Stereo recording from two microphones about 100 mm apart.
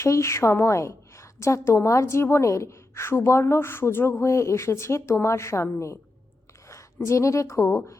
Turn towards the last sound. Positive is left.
turn(degrees=30)  # may be behind; listen again after turning